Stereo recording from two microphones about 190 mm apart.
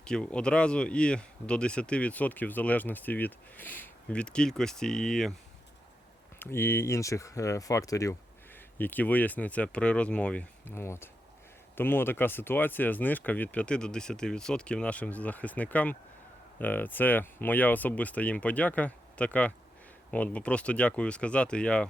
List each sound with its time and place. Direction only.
0.0 s speech: 5° left (ahead or behind)
6.4 s speech: 10° left (ahead or behind)